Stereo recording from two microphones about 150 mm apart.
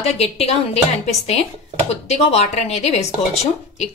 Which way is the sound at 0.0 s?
45° left (ahead or behind).